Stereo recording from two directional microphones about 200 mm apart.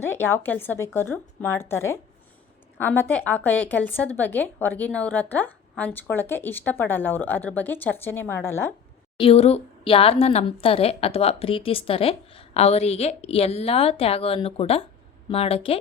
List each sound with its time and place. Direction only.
0.0 s a woman's voice: 10° left (ahead or behind)
9.1 s a woman's voice: 30° left (ahead or behind)